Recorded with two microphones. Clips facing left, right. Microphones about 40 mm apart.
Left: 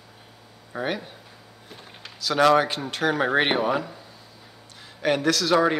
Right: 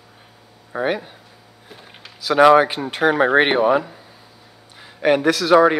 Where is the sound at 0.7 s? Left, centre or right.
Centre.